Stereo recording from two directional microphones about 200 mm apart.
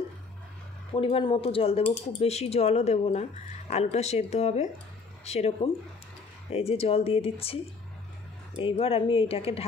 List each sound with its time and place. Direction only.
0.9 s speech: 30° left (ahead or behind)
8.5 s speech: 25° left (ahead or behind)